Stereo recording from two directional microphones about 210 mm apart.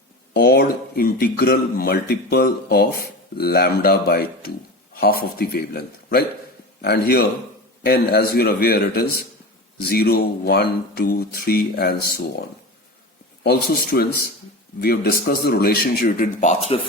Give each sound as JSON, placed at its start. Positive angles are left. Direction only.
{"t": 0.3, "sound": "speech", "side_deg": 50}